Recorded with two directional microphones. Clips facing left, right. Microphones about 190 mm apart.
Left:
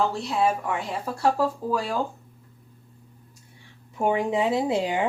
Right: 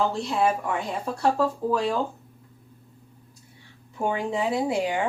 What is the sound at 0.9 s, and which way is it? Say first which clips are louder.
Speech: left 1 dB; 5° left (ahead or behind).